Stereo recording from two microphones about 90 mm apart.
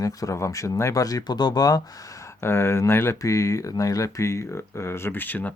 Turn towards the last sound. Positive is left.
turn(degrees=20)  # may be behind; listen again after turning